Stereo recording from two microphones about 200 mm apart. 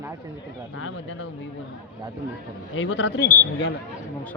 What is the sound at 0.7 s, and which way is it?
Speech, 80° left.